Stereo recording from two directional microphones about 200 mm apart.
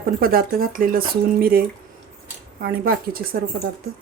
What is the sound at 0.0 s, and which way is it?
Speech, 45° right (ahead or behind).